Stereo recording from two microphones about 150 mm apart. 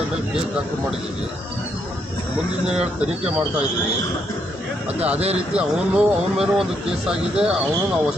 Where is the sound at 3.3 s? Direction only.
5° right (ahead or behind).